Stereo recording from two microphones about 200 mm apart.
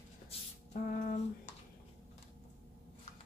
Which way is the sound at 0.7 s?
45° left (ahead or behind).